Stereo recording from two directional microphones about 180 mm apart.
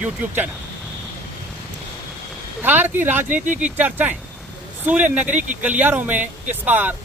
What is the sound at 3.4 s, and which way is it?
Speech, 45° right (ahead or behind).